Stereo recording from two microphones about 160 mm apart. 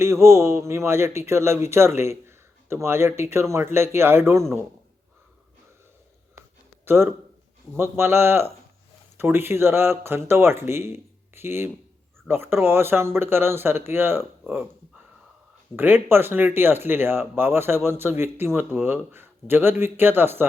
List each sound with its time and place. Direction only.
0.0 s speech: 15° right (ahead or behind)
6.8 s speech: 15° right (ahead or behind)
15.7 s speech: 15° right (ahead or behind)